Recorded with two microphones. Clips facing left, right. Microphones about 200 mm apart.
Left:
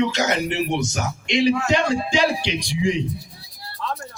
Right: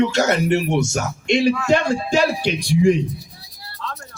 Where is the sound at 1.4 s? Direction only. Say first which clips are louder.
Even; 50° right (ahead or behind).